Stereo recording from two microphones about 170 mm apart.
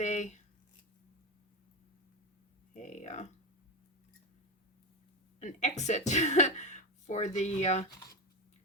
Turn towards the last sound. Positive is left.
turn(degrees=40)  # may be behind; listen again after turning